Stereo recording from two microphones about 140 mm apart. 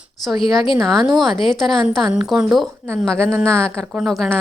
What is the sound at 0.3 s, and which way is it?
Speech, 35° left (ahead or behind).